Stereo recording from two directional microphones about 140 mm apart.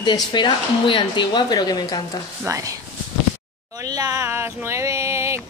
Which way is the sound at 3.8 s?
25° right (ahead or behind).